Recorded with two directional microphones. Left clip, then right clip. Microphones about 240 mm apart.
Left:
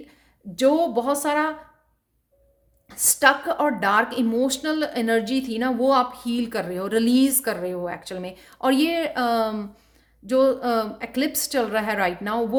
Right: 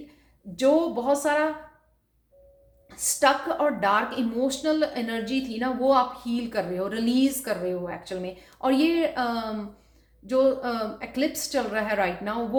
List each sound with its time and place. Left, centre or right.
0.5 s speech: left
2.9 s speech: left